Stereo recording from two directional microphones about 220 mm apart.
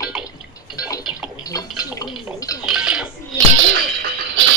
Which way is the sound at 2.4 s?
15° left (ahead or behind).